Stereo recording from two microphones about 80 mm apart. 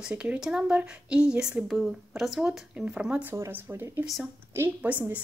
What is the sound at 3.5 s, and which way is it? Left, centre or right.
Speech, right.